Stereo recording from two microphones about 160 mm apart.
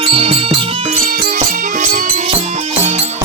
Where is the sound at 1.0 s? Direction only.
75° right (ahead or behind).